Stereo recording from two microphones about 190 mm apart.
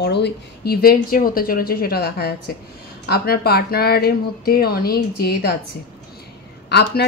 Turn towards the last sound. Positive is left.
turn(degrees=55)  # may be behind; listen again after turning